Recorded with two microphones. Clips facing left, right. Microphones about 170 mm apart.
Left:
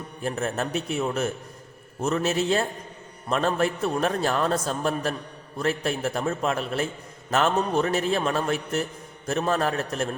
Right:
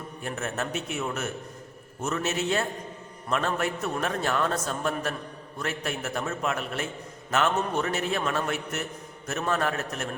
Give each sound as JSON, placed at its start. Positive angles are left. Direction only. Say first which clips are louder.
{"t": 0.2, "sound": "a man's voice", "louder": "left 5 dB", "side_deg": 35}